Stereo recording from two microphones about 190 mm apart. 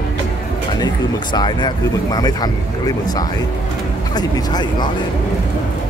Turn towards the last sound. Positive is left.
turn(degrees=20)  # may be behind; listen again after turning